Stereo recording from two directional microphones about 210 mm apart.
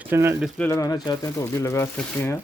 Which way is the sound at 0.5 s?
10° left (ahead or behind).